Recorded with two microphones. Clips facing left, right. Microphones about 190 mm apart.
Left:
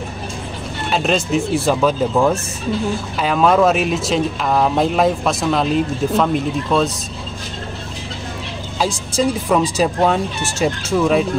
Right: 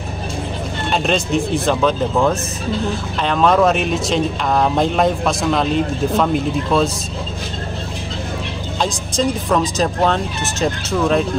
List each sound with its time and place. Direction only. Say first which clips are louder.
0.8 s speech: left 1 dB; 5° left (ahead or behind)
8.7 s speech: left 1 dB; 5° left (ahead or behind)